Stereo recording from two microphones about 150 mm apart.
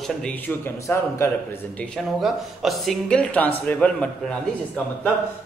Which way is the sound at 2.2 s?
Centre (ahead or behind).